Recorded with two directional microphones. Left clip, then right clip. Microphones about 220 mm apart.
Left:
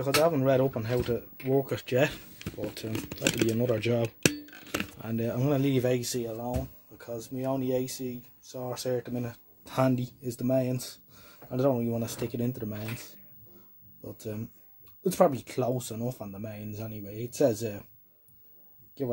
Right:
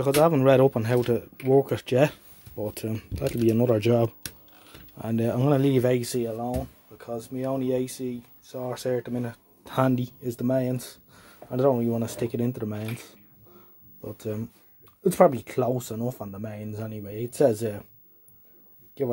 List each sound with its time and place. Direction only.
0.0 s speech: 45° right (ahead or behind); by 17.8 s 20° right (ahead or behind)